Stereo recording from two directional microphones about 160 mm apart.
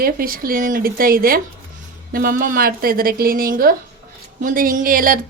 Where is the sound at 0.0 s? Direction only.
65° right (ahead or behind).